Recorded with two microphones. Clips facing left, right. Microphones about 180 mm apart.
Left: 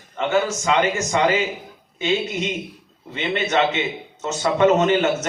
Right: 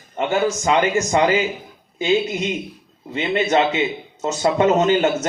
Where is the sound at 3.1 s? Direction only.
35° right (ahead or behind).